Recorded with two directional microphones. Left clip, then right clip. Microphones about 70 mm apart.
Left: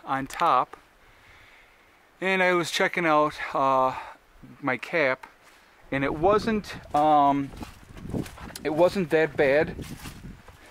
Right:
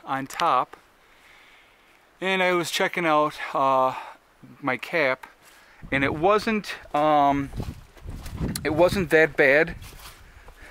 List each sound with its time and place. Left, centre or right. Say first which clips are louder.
0.0 s speech: even; centre
2.1 s speech: even; centre
5.9 s speech: right 2 dB; right